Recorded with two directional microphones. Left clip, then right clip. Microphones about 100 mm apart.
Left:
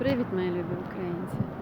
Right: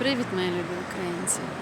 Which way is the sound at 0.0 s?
20° right (ahead or behind).